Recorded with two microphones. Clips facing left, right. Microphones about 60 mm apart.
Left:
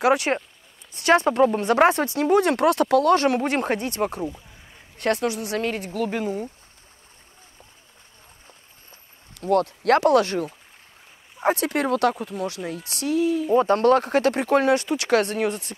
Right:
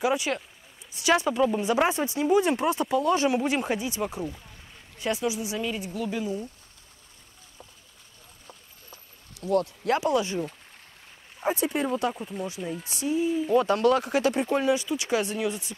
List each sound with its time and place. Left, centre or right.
0.0 s speech: left
0.9 s speech: left
1.6 s speech: left
9.3 s speech: left
11.4 s speech: left
13.6 s speech: left